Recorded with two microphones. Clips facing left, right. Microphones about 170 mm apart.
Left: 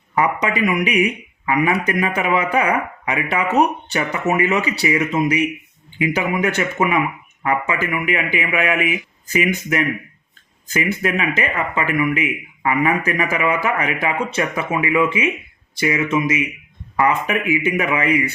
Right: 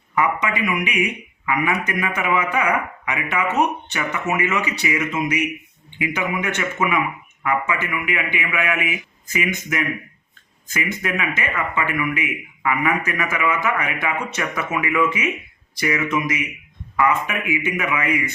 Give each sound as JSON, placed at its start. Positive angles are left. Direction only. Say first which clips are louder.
{"t": 0.2, "sound": "speech", "louder": "left 3 dB", "side_deg": 35}